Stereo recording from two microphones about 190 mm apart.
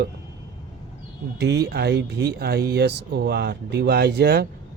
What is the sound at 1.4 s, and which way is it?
Speech, 60° right (ahead or behind).